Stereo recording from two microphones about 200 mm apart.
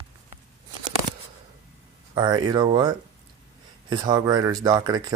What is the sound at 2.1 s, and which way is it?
Speech, 20° right (ahead or behind).